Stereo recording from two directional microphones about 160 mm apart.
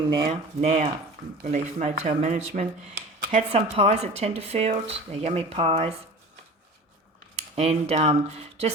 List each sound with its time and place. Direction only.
0.1 s speech: 35° right (ahead or behind)
7.5 s speech: 40° right (ahead or behind)